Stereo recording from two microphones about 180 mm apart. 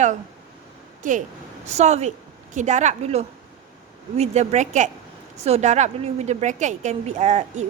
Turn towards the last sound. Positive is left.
turn(degrees=-40)  # may be behind; listen again after turning